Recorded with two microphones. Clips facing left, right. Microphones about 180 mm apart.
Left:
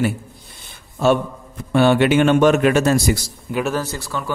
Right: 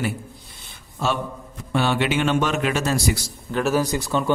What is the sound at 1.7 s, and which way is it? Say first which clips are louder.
Speech: left 7 dB; 50° left (ahead or behind).